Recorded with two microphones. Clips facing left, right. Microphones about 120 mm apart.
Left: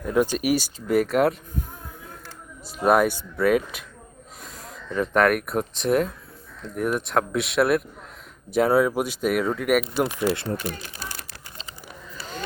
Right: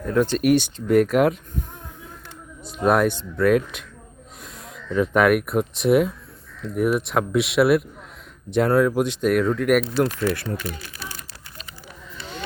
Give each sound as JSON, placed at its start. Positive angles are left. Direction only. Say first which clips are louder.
{"t": 0.1, "sound": "speech", "louder": "right 3 dB", "side_deg": 10}
{"t": 2.6, "sound": "speech", "louder": "even", "side_deg": 5}
{"t": 10.1, "sound": "speech", "louder": "even", "side_deg": 20}
{"t": 12.1, "sound": "a sound", "louder": "even", "side_deg": 40}